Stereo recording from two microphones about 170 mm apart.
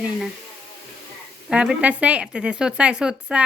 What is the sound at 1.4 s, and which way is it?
A woman's voice, 5° right (ahead or behind).